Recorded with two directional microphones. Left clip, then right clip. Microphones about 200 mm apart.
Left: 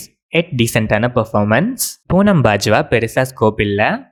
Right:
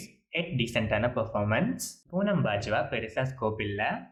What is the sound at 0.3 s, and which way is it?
Speech, 50° left (ahead or behind).